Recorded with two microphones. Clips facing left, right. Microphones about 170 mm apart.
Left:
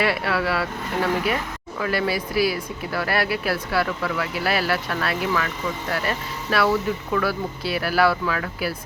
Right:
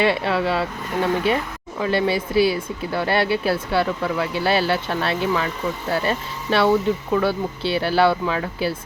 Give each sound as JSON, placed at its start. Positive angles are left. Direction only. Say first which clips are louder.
{"t": 0.0, "sound": "speech", "louder": "right 3 dB", "side_deg": -25}